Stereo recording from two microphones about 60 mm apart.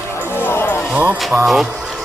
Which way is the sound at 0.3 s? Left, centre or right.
Left.